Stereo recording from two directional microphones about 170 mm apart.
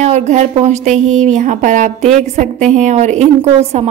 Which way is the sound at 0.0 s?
40° right (ahead or behind).